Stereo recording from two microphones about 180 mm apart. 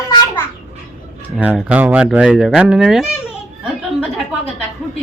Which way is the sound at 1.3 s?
5° right (ahead or behind).